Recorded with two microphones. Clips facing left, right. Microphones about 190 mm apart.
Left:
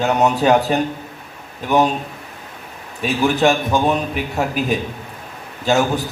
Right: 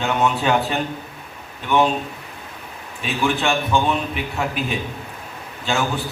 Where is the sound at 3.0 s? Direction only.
40° left (ahead or behind).